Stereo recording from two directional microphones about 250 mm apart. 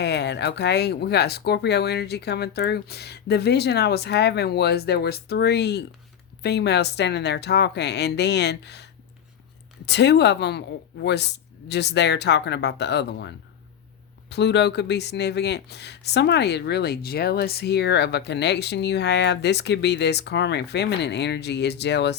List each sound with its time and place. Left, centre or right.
0.0 s speech: left